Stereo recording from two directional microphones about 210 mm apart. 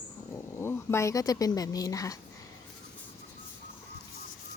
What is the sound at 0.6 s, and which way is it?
A woman's voice, 10° left (ahead or behind).